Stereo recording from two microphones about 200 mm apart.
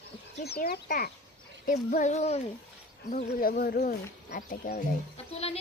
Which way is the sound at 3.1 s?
45° left (ahead or behind).